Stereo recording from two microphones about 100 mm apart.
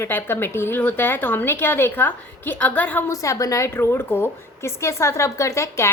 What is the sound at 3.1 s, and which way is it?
Speech, 35° left (ahead or behind).